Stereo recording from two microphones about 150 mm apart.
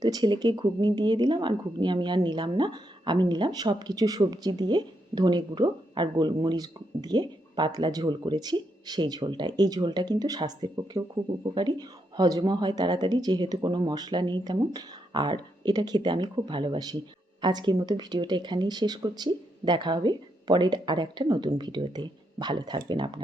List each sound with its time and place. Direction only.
0.0 s speech: 25° right (ahead or behind)